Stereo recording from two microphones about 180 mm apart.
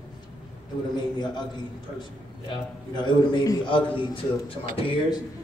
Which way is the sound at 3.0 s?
25° left (ahead or behind).